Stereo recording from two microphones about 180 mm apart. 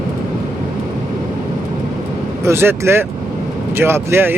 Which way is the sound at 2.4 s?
15° right (ahead or behind).